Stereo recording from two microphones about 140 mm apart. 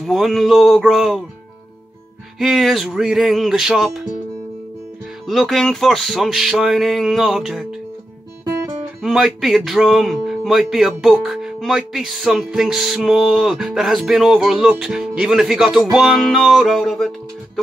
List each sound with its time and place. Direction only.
0.0 s speech: centre (ahead or behind)
2.3 s speech: centre (ahead or behind)
5.2 s speech: centre (ahead or behind)
8.5 s guitar: 20° right (ahead or behind)
9.0 s speech: centre (ahead or behind)